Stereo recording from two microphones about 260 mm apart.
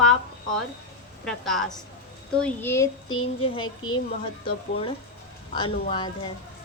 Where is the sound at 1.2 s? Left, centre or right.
Centre.